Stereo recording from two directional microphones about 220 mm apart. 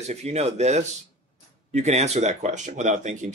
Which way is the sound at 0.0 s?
30° right (ahead or behind).